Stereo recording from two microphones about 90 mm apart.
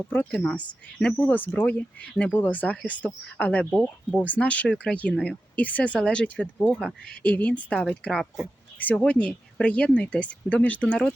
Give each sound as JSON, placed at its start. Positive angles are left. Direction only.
{"t": 0.3, "sound": "speech", "side_deg": 5}
{"t": 1.1, "sound": "speech", "side_deg": 20}